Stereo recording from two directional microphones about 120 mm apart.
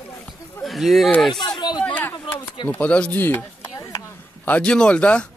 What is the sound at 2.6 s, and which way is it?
Speech, 15° left (ahead or behind).